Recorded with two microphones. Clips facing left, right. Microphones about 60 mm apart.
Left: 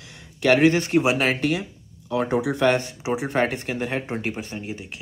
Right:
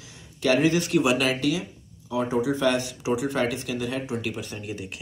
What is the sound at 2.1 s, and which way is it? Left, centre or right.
Speech, left.